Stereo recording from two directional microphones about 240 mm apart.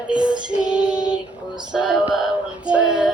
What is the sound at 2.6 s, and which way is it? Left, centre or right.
Child singing, centre.